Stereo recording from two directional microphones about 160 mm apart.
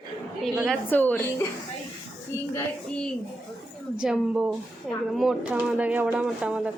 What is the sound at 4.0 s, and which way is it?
Speech, 5° right (ahead or behind).